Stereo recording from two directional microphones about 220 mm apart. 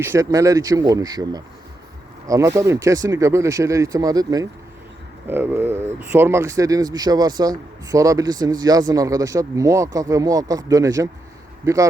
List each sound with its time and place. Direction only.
0.0 s speech: 10° right (ahead or behind)